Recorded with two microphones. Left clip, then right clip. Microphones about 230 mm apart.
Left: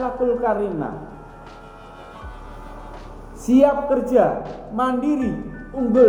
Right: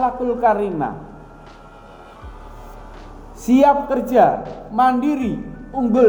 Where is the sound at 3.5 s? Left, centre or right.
Right.